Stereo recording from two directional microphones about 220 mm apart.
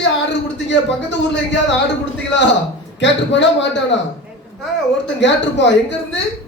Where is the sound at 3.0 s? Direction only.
55° left (ahead or behind).